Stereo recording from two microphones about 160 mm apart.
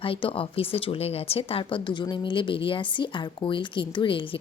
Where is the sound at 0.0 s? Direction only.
35° left (ahead or behind).